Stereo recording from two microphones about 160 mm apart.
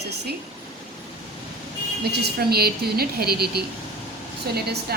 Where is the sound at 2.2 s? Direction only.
80° right.